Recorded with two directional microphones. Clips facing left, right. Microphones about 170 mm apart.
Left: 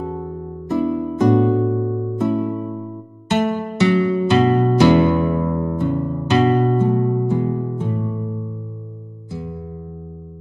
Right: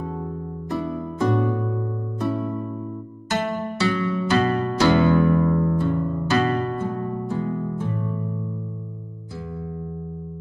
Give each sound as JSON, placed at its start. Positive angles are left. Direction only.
{"t": 0.1, "sound": "music", "side_deg": 25}
{"t": 1.7, "sound": "music", "side_deg": 10}
{"t": 2.1, "sound": "music", "side_deg": 20}